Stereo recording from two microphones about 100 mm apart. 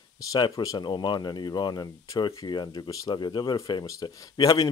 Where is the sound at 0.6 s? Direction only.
40° left (ahead or behind).